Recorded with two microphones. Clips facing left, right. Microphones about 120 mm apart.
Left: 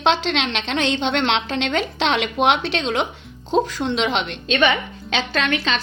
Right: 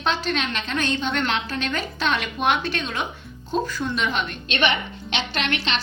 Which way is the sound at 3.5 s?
90° left.